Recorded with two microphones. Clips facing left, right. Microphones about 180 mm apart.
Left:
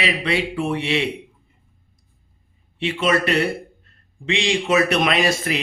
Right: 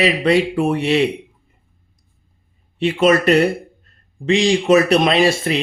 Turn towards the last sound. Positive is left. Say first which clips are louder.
# right 5 dB
turn(degrees=-30)  # may be behind; listen again after turning